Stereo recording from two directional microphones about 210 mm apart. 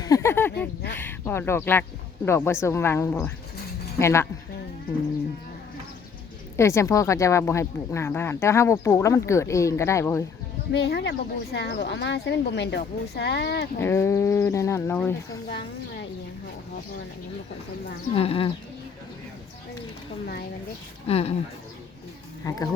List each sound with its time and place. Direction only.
0.0 s a sound: 15° left (ahead or behind)
0.9 s speech: 10° left (ahead or behind)
6.6 s speech: 15° left (ahead or behind)
10.7 s speech: 50° left (ahead or behind)
13.7 s speech: 10° left (ahead or behind)
15.4 s a woman's voice: 55° left (ahead or behind)
18.1 s speech: 25° left (ahead or behind)
21.1 s speech: 30° left (ahead or behind)
22.4 s speech: 15° left (ahead or behind)